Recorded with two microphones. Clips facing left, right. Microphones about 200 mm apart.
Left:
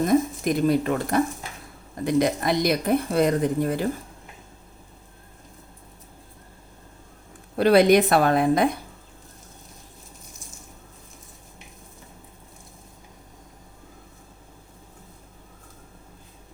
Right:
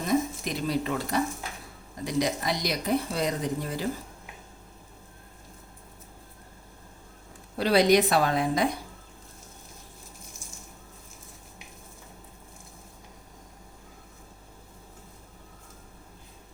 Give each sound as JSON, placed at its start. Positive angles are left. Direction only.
{"t": 0.0, "sound": "speech", "side_deg": 50}
{"t": 7.5, "sound": "speech", "side_deg": 55}